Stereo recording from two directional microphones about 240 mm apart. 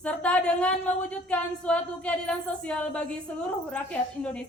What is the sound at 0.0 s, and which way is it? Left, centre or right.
A woman's voice, centre.